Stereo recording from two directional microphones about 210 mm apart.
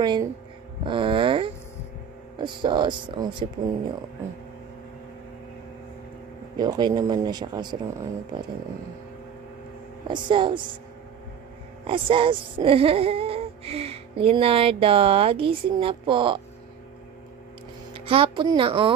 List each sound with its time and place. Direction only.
0.0 s speech: 20° right (ahead or behind)
6.5 s speech: 20° right (ahead or behind)
10.0 s speech: 20° right (ahead or behind)
11.8 s speech: 25° right (ahead or behind)
17.9 s speech: 25° right (ahead or behind)